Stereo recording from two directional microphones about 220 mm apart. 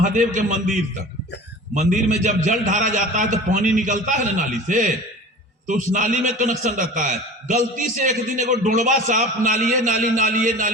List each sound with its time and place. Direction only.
0.0 s a man's voice: 35° right (ahead or behind)